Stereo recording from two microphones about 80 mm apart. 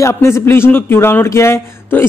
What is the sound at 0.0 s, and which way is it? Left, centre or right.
Speech, left.